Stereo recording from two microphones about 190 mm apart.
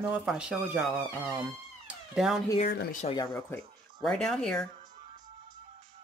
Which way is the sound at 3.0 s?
20° left (ahead or behind).